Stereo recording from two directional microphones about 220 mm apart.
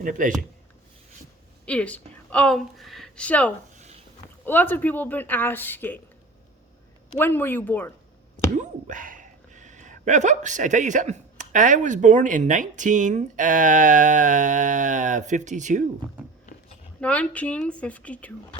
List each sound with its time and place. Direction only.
0.0 s speech: 35° right (ahead or behind)
1.6 s a woman's voice: 5° left (ahead or behind)
7.2 s speech: 10° left (ahead or behind)
8.5 s speech: 35° right (ahead or behind)
17.0 s a woman's voice: 5° left (ahead or behind)